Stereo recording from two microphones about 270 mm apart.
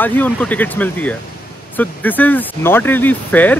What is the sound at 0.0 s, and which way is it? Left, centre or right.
Speech, centre.